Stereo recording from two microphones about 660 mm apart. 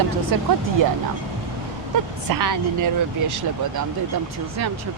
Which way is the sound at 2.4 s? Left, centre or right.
Right.